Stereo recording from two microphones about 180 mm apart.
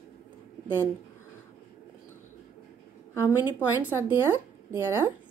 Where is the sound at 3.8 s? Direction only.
15° right (ahead or behind).